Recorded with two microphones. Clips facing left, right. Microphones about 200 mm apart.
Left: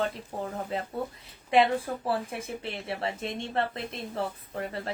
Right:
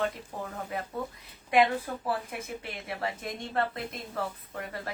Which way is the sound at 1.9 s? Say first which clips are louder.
Left 3 dB; 35° left (ahead or behind).